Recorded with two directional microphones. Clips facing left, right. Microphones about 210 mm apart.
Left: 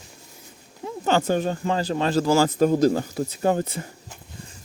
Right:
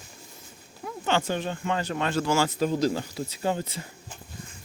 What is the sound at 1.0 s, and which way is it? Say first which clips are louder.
A man's voice: left 5 dB; 40° left (ahead or behind).